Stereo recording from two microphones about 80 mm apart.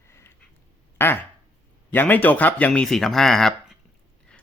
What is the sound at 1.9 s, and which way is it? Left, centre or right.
Speech, left.